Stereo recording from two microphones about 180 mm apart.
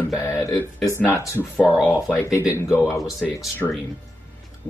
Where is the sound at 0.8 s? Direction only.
15° left (ahead or behind).